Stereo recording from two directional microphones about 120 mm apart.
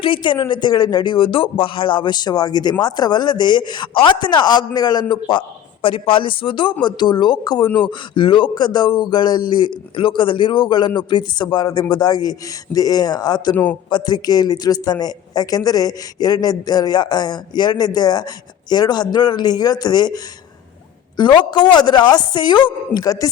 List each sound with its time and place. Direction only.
0.0 s a man's voice: 45° left (ahead or behind)